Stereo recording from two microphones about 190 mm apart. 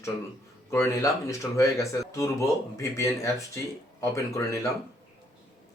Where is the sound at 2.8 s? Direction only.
15° left (ahead or behind).